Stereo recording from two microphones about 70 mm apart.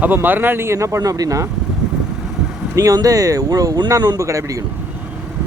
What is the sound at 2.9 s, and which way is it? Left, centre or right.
Speech, right.